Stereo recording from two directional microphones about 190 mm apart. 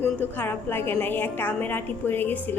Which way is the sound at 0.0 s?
10° left (ahead or behind).